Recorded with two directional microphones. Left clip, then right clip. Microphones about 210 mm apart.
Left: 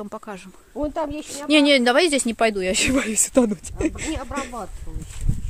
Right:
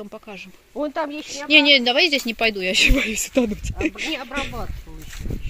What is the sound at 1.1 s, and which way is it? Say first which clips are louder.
Speech: right 2 dB; 20° left (ahead or behind).